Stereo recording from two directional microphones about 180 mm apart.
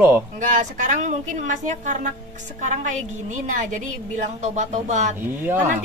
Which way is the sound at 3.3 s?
45° right (ahead or behind).